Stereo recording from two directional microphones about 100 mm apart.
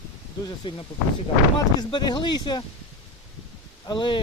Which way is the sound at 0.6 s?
50° left (ahead or behind).